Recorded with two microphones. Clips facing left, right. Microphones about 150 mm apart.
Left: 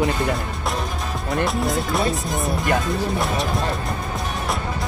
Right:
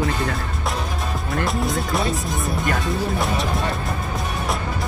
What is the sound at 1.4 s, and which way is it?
Speech, centre (ahead or behind).